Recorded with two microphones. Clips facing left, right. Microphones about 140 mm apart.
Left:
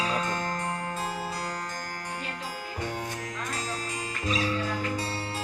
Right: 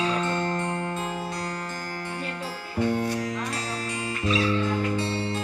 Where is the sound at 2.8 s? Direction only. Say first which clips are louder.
Right 10 dB; 15° left (ahead or behind).